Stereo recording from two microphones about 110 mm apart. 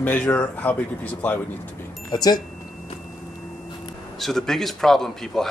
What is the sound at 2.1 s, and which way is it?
Speech, 35° left (ahead or behind).